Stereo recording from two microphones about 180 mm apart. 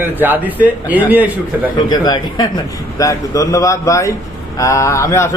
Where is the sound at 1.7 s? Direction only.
25° left (ahead or behind).